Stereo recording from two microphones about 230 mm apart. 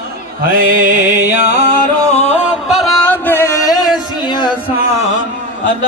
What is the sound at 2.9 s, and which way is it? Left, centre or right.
Music, centre.